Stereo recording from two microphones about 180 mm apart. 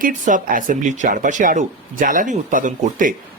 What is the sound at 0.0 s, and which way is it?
Speech, 45° right (ahead or behind).